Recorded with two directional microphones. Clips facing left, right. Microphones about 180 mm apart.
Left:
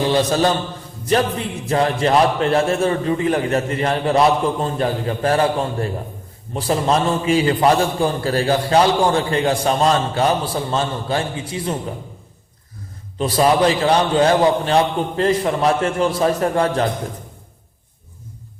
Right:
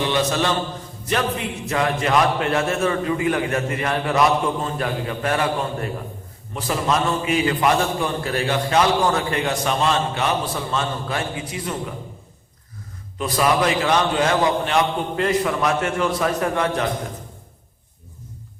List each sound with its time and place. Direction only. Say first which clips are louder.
0.0 s a man's voice: left 4 dB; 35° left (ahead or behind)
13.1 s a man's voice: left 4 dB; 30° left (ahead or behind)